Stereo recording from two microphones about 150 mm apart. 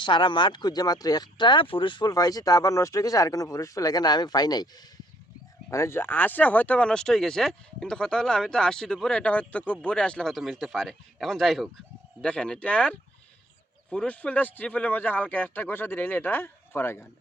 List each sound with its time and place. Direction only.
0.0 s speech: 30° left (ahead or behind)
5.7 s speech: 15° left (ahead or behind)